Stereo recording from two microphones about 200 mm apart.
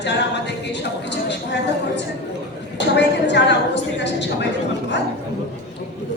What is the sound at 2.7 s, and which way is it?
A capella, 60° left (ahead or behind).